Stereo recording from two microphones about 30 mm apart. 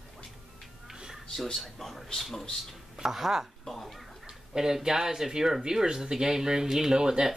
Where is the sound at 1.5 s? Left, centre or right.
Centre.